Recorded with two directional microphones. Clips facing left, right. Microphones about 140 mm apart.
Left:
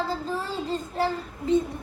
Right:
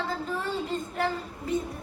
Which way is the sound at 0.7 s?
30° left (ahead or behind).